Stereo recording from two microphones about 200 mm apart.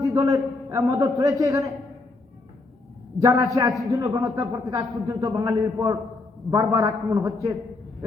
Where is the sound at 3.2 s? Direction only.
15° right (ahead or behind).